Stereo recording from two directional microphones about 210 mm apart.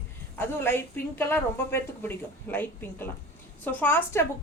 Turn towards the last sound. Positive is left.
turn(degrees=10)  # may be behind; listen again after turning